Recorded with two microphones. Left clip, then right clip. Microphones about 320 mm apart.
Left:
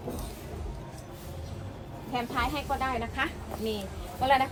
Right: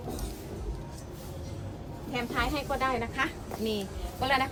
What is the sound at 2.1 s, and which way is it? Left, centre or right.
Speech, centre.